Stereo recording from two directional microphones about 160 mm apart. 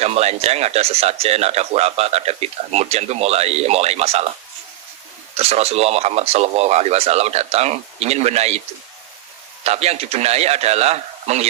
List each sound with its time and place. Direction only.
0.0 s speech: 40° right (ahead or behind)
5.3 s speech: 40° right (ahead or behind)
9.6 s speech: 40° right (ahead or behind)